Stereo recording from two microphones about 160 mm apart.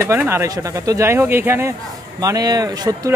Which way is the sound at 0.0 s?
15° right (ahead or behind).